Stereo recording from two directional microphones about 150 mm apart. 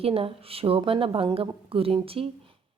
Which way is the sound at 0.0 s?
40° right (ahead or behind).